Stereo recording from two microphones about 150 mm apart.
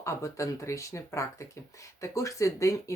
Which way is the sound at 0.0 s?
20° left (ahead or behind).